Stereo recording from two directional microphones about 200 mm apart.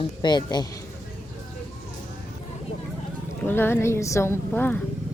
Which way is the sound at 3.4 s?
10° left (ahead or behind).